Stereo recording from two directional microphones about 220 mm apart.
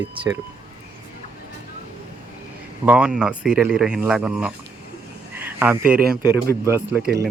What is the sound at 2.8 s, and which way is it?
Speech, 5° right (ahead or behind).